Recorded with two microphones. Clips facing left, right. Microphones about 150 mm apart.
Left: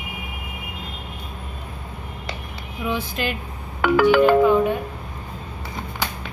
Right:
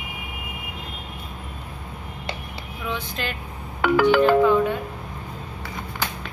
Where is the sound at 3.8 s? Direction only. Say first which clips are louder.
Left 1 dB; 60° left (ahead or behind).